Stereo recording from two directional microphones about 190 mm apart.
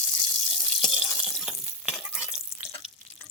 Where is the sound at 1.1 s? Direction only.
5° left (ahead or behind).